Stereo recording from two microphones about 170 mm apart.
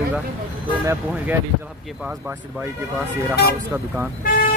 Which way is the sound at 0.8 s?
10° right (ahead or behind).